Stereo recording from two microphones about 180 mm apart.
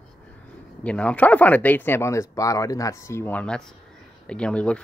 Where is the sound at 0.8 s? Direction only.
5° left (ahead or behind).